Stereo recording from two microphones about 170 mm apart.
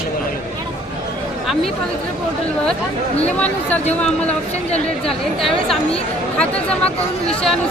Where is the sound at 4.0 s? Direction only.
5° left (ahead or behind).